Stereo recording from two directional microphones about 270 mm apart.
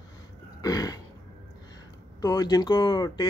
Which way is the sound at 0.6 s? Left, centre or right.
Centre.